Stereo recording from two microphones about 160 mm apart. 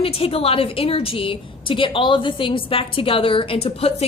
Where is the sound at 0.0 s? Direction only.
35° left (ahead or behind).